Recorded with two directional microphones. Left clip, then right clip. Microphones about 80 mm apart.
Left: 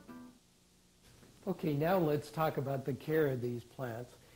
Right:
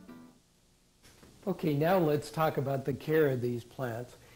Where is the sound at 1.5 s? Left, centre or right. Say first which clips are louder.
Right 4 dB; left.